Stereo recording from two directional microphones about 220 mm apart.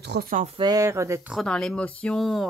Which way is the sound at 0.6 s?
15° right (ahead or behind).